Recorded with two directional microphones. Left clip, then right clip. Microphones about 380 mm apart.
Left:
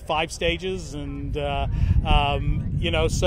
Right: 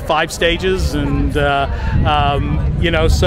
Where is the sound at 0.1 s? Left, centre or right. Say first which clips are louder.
Right 9 dB; left.